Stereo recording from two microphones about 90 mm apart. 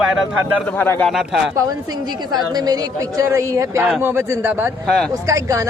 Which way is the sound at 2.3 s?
50° right (ahead or behind).